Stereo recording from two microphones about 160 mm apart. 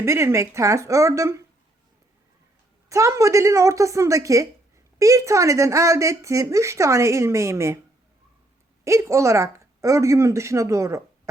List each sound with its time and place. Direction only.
0.0 s a woman's voice: 15° right (ahead or behind)
2.9 s speech: 20° right (ahead or behind)
8.8 s speech: 20° right (ahead or behind)